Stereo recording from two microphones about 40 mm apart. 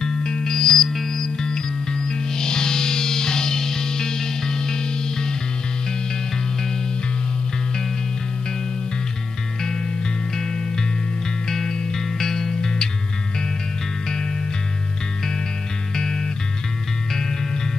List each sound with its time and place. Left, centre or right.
0.0 s music: centre
0.8 s music: centre
1.1 s music: centre
11.4 s music: centre
16.0 s music: centre